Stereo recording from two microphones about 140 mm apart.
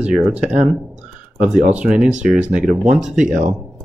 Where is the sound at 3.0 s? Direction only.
5° right (ahead or behind).